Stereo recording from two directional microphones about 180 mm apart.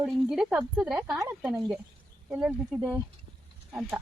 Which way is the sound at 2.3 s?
5° right (ahead or behind).